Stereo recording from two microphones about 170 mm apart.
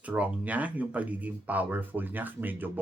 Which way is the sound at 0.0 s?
10° right (ahead or behind).